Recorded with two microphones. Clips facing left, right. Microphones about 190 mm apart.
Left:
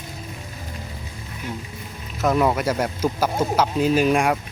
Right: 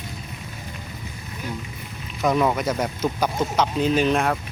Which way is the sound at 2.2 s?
5° left (ahead or behind).